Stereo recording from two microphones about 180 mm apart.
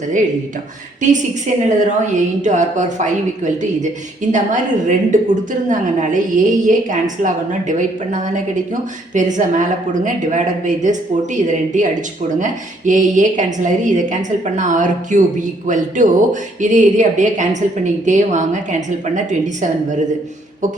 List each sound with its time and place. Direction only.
1.0 s a woman's voice: 45° right (ahead or behind)